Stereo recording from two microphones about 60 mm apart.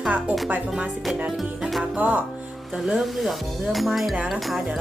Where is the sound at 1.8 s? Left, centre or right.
Right.